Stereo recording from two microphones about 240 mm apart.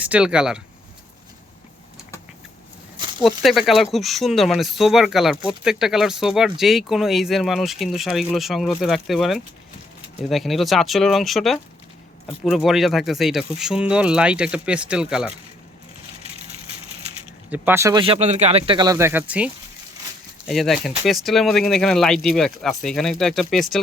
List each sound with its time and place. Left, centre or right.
0.0 s speech: centre
3.2 s speech: centre
17.5 s speech: centre
20.5 s speech: centre